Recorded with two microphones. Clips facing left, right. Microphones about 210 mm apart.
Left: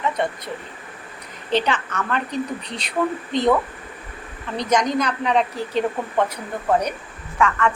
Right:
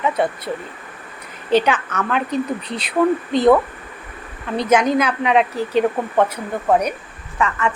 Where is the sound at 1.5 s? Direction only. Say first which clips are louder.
Right 5 dB; 5° right (ahead or behind).